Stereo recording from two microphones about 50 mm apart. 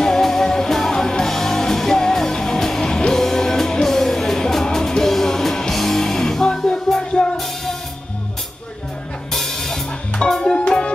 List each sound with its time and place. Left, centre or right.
0.0 s music: centre
9.3 s music: centre